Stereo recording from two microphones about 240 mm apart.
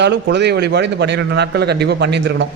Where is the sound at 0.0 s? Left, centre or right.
Right.